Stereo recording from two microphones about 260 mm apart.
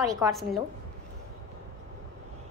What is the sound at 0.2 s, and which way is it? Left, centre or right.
Speech, centre.